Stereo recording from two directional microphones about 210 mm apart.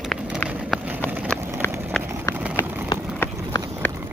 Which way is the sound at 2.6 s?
10° right (ahead or behind).